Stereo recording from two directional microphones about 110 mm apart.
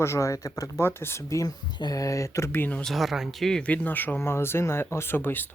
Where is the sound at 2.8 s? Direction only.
Centre (ahead or behind); by 5.4 s 20° left (ahead or behind).